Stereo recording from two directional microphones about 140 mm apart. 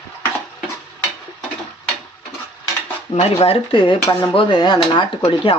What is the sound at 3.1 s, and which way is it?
Speech, 30° left (ahead or behind).